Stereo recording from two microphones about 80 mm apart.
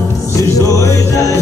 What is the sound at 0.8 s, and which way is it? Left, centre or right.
Music, left.